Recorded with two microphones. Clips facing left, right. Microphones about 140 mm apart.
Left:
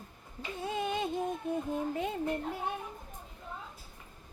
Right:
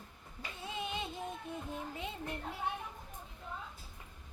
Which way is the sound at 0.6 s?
45° left (ahead or behind).